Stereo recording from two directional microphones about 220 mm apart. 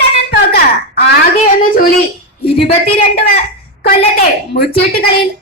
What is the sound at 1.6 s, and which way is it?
Speech, 40° left (ahead or behind).